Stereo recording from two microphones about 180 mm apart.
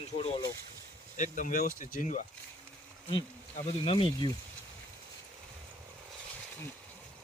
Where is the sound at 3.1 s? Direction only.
30° left (ahead or behind).